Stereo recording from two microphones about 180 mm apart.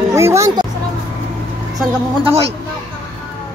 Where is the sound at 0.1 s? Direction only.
15° right (ahead or behind).